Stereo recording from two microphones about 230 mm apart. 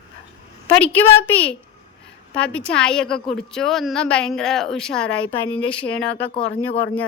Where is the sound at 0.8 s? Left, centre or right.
Centre.